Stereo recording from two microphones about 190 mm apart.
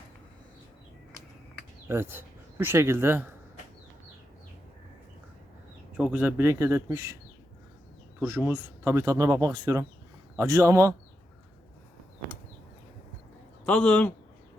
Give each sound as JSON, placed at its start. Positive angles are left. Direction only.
{"t": 1.9, "sound": "speech", "side_deg": -10}
{"t": 6.0, "sound": "speech", "side_deg": -10}
{"t": 8.2, "sound": "speech", "side_deg": -10}
{"t": 13.7, "sound": "a man's voice", "side_deg": 5}